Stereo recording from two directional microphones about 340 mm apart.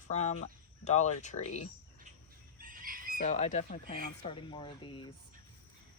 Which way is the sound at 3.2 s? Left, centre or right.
Centre.